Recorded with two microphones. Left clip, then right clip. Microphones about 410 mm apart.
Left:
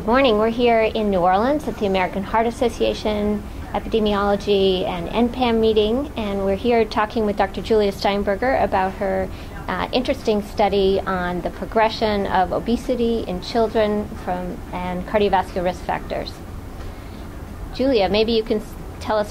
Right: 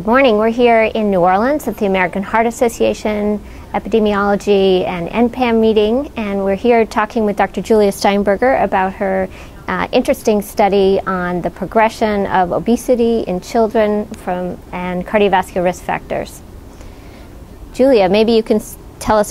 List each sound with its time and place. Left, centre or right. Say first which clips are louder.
0.0 s a woman's voice: right 5 dB; right
17.7 s a woman's voice: right 7 dB; right